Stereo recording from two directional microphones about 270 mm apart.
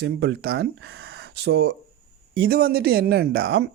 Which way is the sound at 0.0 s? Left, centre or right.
Right.